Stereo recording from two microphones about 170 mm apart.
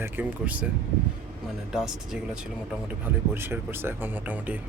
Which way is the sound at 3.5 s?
15° right (ahead or behind).